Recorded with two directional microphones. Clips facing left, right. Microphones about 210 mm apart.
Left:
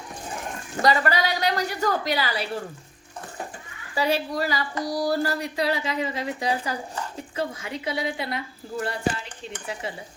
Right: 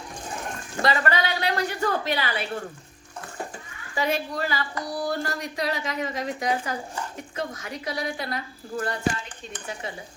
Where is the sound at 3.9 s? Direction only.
35° left (ahead or behind).